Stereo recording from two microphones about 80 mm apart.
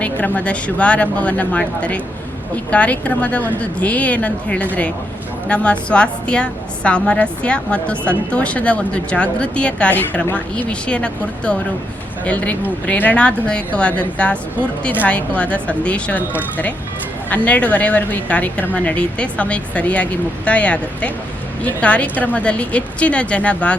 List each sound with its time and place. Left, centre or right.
0.0 s a woman's voice: centre
17.2 s a woman's voice: centre